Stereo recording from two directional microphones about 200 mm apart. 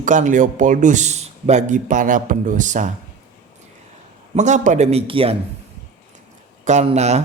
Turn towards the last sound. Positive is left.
turn(degrees=-35)  # may be behind; listen again after turning